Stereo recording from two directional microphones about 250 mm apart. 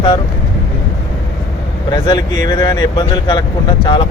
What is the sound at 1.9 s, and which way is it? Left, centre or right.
Speech, centre.